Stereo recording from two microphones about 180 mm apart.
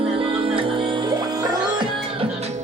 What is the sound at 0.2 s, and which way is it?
Music, 30° right (ahead or behind).